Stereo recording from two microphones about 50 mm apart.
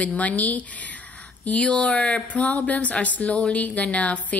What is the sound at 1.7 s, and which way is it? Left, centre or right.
A woman's voice, left.